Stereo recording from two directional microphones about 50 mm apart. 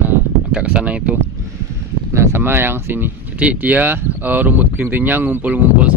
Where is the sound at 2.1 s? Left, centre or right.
Right.